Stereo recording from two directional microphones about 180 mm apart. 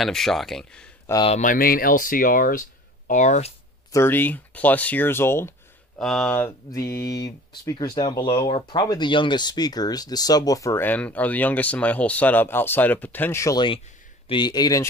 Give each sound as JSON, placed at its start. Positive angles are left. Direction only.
{"t": 0.0, "sound": "speech", "side_deg": 0}
{"t": 1.2, "sound": "speech", "side_deg": 40}
{"t": 3.9, "sound": "speech", "side_deg": 10}
{"t": 5.9, "sound": "speech", "side_deg": 0}